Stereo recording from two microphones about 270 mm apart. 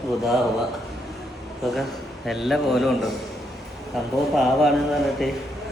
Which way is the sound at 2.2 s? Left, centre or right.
Centre.